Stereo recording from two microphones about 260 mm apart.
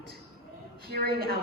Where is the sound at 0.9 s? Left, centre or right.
Right.